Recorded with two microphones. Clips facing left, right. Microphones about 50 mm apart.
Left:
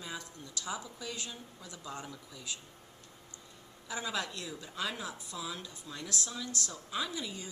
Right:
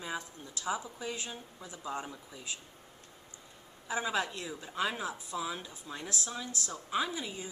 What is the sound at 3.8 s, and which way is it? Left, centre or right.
Speech, right.